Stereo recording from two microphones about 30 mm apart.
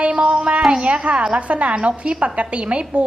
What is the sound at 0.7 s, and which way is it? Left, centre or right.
A woman's voice, right.